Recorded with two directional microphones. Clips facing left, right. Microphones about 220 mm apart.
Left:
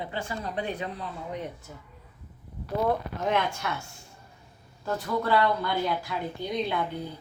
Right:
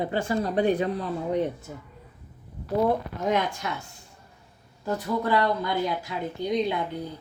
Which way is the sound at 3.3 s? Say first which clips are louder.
Right 2 dB; 15° right (ahead or behind).